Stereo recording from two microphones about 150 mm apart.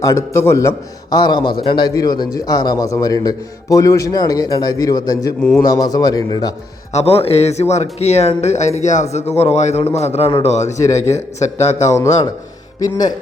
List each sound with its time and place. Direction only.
0.0 s a man's voice: 20° left (ahead or behind)
5.4 s a man's voice: 5° left (ahead or behind)
5.6 s a man's voice: 25° left (ahead or behind)
6.9 s a man's voice: 40° left (ahead or behind)
10.7 s a man's voice: 20° left (ahead or behind)
10.9 s a man's voice: 50° left (ahead or behind)
11.9 s a man's voice: 20° left (ahead or behind)